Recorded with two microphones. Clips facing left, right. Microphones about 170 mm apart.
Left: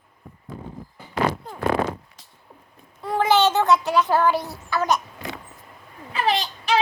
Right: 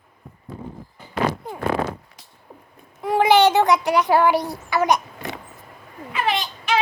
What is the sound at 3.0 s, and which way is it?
Speech, 15° right (ahead or behind).